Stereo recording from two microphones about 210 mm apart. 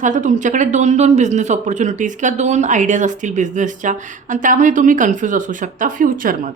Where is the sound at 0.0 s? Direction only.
35° right (ahead or behind).